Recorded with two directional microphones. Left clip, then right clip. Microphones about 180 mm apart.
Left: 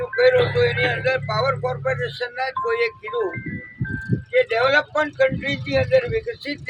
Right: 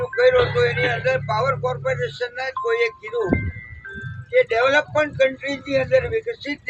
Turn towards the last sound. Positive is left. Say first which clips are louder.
# right 1 dB
turn(degrees=0)  # may be behind; listen again after turning